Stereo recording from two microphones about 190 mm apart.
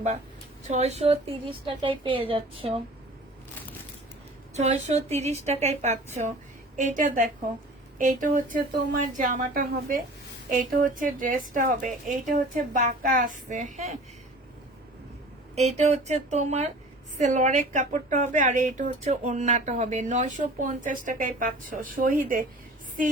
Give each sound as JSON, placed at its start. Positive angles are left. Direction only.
{"t": 0.7, "sound": "a woman's voice", "side_deg": -35}
{"t": 4.5, "sound": "a woman's voice", "side_deg": -35}
{"t": 15.5, "sound": "a woman's voice", "side_deg": -35}